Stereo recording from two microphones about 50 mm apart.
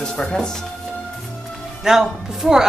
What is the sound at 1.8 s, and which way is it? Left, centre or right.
Speech, centre.